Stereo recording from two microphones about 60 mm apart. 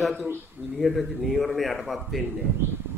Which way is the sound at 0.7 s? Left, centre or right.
Centre.